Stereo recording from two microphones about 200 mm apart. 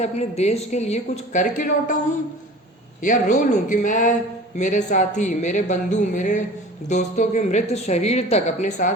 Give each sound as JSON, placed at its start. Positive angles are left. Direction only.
{"t": 0.0, "sound": "speech", "side_deg": 35}
{"t": 3.0, "sound": "speech", "side_deg": 40}